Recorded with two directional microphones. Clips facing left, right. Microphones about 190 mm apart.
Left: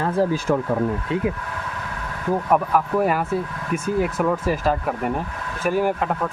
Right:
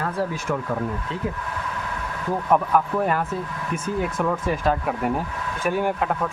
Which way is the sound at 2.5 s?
5° left (ahead or behind).